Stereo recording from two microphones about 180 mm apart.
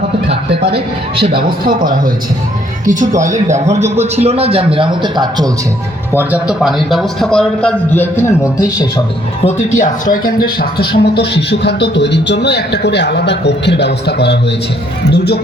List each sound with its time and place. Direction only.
1.2 s a man's voice: 55° right (ahead or behind); by 5.5 s 25° right (ahead or behind)
6.1 s a man's voice: 5° right (ahead or behind); by 8.9 s 15° left (ahead or behind)
9.4 s speech: 40° left (ahead or behind)
10.6 s speech: 60° left (ahead or behind)